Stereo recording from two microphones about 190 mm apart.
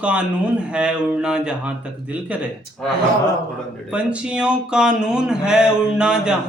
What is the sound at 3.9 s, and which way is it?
A man's voice, 5° right (ahead or behind).